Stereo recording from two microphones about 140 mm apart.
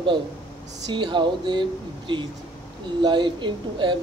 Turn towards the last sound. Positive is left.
turn(degrees=-35)  # may be behind; listen again after turning